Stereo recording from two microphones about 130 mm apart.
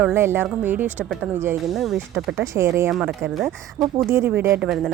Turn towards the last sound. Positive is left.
turn(degrees=-5)  # may be behind; listen again after turning